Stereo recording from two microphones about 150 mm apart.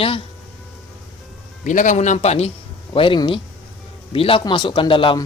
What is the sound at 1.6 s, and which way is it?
Speech, 60° left (ahead or behind).